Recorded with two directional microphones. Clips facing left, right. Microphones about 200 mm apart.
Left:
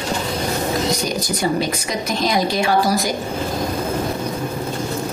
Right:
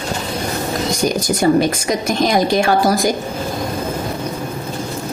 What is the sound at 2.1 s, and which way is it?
A woman's voice, 50° right (ahead or behind).